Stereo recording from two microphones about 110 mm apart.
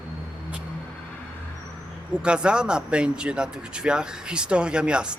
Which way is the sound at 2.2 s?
10° right (ahead or behind).